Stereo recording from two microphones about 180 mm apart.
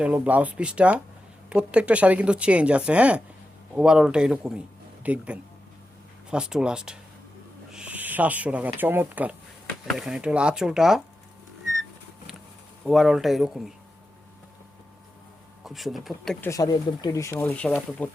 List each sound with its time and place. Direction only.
0.0 s speech: 10° right (ahead or behind)
7.7 s owl: 5° right (ahead or behind)
8.8 s speech: 10° right (ahead or behind)
12.8 s speech: centre (ahead or behind)
15.6 s speech: centre (ahead or behind)
16.5 s speech: 20° left (ahead or behind)